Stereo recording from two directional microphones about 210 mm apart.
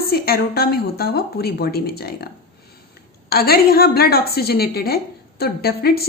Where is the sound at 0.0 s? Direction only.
45° left (ahead or behind).